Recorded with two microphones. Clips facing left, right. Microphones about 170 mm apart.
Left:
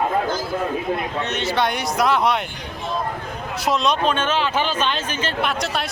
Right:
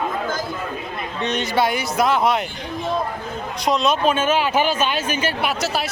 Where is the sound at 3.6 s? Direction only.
Centre (ahead or behind).